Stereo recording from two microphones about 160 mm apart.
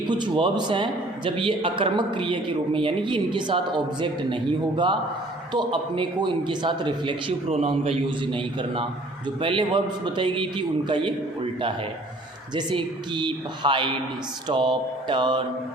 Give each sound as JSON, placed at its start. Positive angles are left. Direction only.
{"t": 0.1, "sound": "speech", "side_deg": -30}
{"t": 12.5, "sound": "speech", "side_deg": -30}